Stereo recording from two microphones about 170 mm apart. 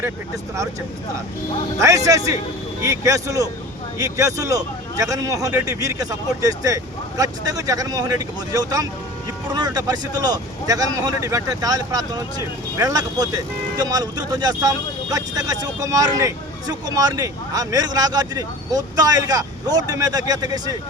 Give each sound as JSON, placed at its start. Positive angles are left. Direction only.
{"t": 1.8, "sound": "speech", "side_deg": -20}